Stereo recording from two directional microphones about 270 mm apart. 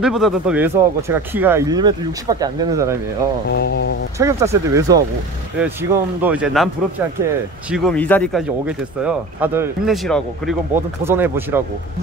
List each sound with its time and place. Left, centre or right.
0.0 s speech: centre
3.4 s speech: left
4.2 s speech: centre
7.7 s speech: centre